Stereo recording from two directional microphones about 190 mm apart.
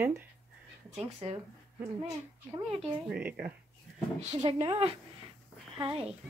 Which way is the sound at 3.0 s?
5° right (ahead or behind).